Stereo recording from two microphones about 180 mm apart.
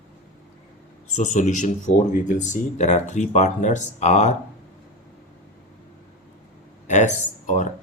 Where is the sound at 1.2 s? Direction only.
45° left (ahead or behind).